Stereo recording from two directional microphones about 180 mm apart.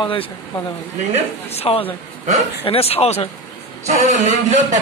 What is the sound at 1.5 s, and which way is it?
Speech, 35° left (ahead or behind).